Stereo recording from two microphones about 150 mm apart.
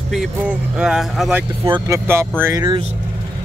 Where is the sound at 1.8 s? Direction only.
20° right (ahead or behind).